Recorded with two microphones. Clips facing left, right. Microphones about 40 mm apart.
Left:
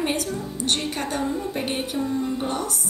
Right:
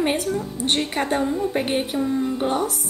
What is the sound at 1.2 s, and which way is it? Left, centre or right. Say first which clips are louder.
Speech: right 4 dB; centre.